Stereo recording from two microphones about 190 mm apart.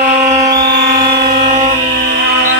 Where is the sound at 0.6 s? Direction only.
65° right (ahead or behind).